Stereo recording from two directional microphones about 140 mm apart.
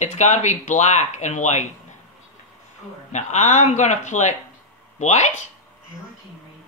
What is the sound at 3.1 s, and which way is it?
Speech, 55° left (ahead or behind).